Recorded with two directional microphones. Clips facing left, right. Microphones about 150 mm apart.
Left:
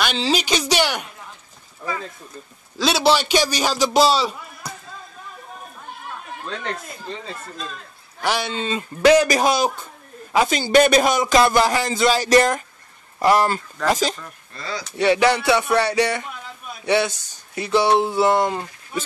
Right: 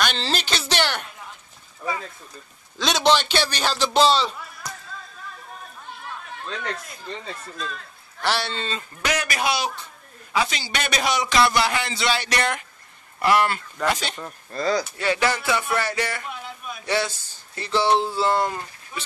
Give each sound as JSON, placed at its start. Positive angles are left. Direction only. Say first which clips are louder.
{"t": 0.0, "sound": "a sound", "louder": "left 4 dB", "side_deg": 5}
{"t": 2.8, "sound": "speech", "louder": "left 2 dB", "side_deg": 5}
{"t": 8.2, "sound": "speech", "louder": "left 2 dB", "side_deg": 15}
{"t": 9.0, "sound": "a man's voice", "louder": "left 11 dB", "side_deg": 30}
{"t": 14.2, "sound": "speech", "louder": "right 9 dB", "side_deg": -40}
{"t": 15.0, "sound": "speech", "louder": "left 6 dB", "side_deg": 20}